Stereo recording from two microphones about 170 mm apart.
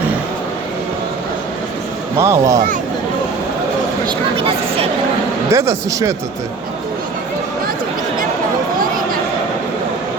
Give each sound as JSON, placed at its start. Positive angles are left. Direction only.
{"t": 2.1, "sound": "speech", "side_deg": -15}
{"t": 4.0, "sound": "speech", "side_deg": -35}
{"t": 5.5, "sound": "speech", "side_deg": -15}